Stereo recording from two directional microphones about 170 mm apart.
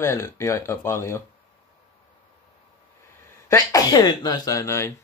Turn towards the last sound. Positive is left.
turn(degrees=15)  # may be behind; listen again after turning